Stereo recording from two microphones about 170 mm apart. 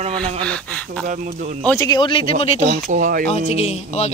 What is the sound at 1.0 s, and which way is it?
Speech, 50° right (ahead or behind).